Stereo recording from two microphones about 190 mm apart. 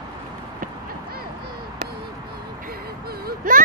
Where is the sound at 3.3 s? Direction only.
45° right (ahead or behind).